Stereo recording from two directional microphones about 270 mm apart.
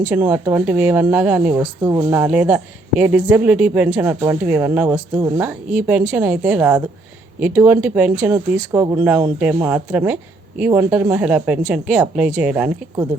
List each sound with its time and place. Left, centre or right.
0.0 s speech: centre